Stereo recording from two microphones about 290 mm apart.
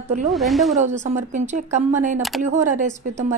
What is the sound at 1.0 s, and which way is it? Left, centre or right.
Speech, right.